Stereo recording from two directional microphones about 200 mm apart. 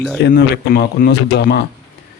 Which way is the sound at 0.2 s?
55° left (ahead or behind).